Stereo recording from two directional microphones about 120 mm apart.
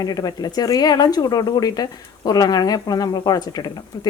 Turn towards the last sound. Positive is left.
turn(degrees=35)  # may be behind; listen again after turning